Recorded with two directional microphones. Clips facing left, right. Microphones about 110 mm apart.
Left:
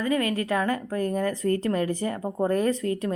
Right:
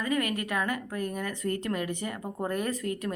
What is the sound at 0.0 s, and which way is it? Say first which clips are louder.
A woman's voice: left 4 dB; 30° left (ahead or behind).